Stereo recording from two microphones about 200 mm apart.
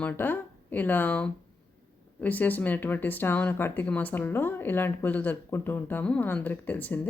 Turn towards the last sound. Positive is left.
turn(degrees=10)  # may be behind; listen again after turning